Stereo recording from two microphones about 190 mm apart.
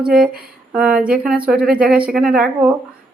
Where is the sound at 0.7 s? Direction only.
5° right (ahead or behind).